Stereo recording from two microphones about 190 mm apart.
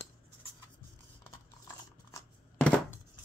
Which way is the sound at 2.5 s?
5° left (ahead or behind).